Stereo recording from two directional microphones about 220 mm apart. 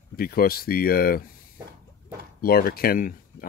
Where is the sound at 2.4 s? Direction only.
45° left (ahead or behind).